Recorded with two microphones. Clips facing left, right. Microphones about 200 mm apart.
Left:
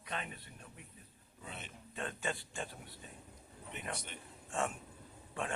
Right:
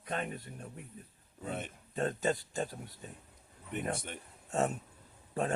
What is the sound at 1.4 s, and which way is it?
A man's voice, 50° right (ahead or behind).